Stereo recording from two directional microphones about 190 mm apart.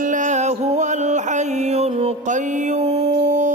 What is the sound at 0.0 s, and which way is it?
Music, 40° right (ahead or behind).